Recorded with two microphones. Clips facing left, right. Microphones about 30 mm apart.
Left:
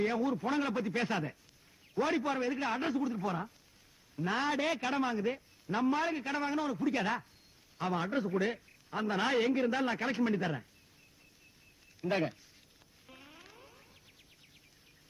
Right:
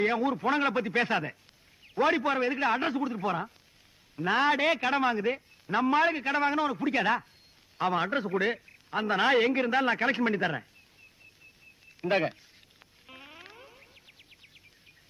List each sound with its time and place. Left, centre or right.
0.0 s a man's voice: right
8.5 s a man's voice: right
11.9 s speech: right
13.1 s a sound: right